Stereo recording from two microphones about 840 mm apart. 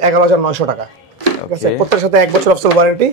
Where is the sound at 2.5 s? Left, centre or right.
Right.